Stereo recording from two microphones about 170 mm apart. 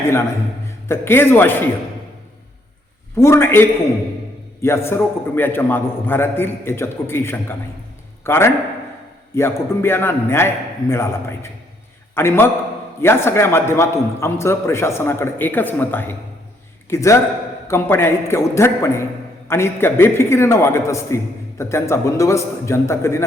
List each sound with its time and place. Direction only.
0.9 s a man's voice: 15° left (ahead or behind)
3.2 s a man's voice: 15° left (ahead or behind)